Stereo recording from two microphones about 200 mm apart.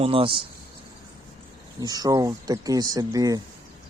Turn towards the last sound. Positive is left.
turn(degrees=-15)  # may be behind; listen again after turning